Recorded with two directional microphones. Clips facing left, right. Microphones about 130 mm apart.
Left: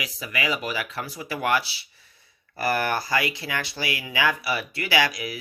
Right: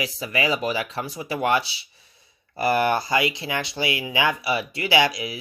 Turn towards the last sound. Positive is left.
turn(degrees=-20)  # may be behind; listen again after turning